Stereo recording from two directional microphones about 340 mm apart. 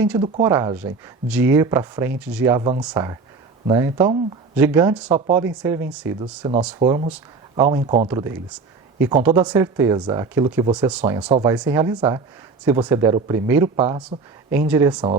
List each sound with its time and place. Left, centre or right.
0.0 s speech: centre
6.7 s speech: centre